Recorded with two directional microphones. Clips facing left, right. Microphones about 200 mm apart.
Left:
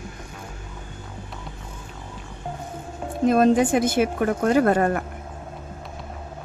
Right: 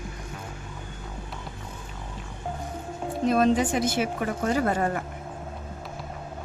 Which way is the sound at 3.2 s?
50° left (ahead or behind).